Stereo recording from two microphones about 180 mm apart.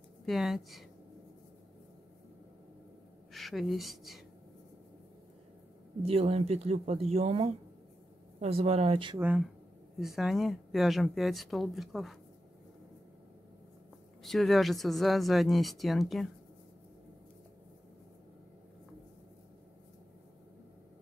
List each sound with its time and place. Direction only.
0.2 s speech: centre (ahead or behind)
3.3 s speech: centre (ahead or behind)
6.0 s speech: 35° right (ahead or behind)
9.2 s speech: 10° right (ahead or behind)
14.2 s speech: centre (ahead or behind)